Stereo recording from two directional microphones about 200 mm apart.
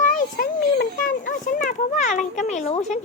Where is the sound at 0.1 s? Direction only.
45° left (ahead or behind).